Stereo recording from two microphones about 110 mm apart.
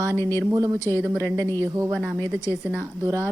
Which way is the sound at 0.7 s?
25° left (ahead or behind).